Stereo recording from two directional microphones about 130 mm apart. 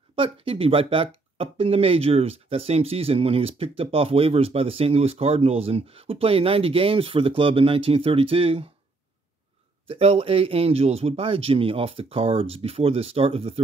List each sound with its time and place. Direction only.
0.1 s speech: 45° right (ahead or behind)
9.8 s speech: 50° right (ahead or behind)